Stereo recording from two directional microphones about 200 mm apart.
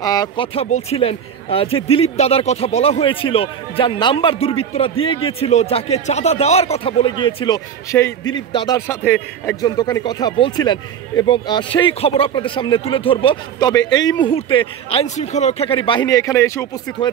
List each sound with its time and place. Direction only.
0.0 s speech: 20° left (ahead or behind)
0.7 s speech: 35° left (ahead or behind); by 17.1 s 15° left (ahead or behind)